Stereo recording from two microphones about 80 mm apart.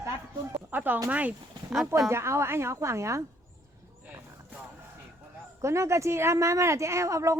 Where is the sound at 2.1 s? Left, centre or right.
Right.